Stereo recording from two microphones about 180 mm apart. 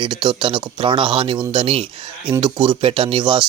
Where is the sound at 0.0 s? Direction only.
25° right (ahead or behind).